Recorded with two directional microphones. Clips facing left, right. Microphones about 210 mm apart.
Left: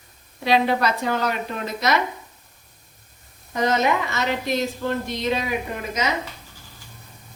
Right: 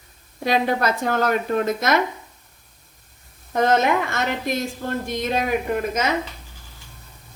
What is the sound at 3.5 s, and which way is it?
Speech, 50° right (ahead or behind).